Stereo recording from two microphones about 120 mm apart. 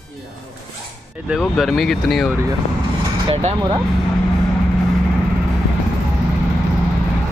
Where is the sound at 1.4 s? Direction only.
Centre (ahead or behind).